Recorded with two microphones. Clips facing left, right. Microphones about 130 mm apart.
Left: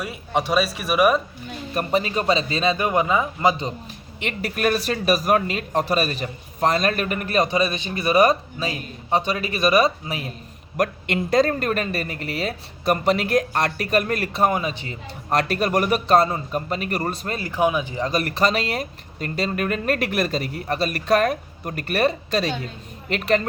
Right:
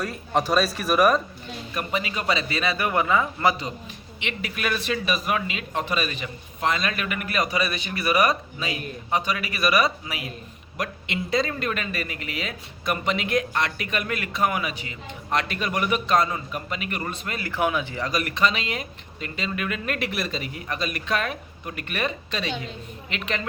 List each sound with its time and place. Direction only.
0.0 s a man's voice: 5° left (ahead or behind)
1.7 s a man's voice: 40° left (ahead or behind); by 3.7 s 20° left (ahead or behind)
4.2 s a man's voice: 45° left (ahead or behind)
10.8 s a man's voice: 50° left (ahead or behind); by 14.9 s 30° left (ahead or behind)
15.3 s a man's voice: 40° left (ahead or behind)
17.4 s a man's voice: 20° left (ahead or behind)
18.1 s speech: 35° left (ahead or behind)